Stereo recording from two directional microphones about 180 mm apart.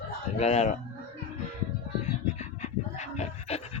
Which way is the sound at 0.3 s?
35° left (ahead or behind).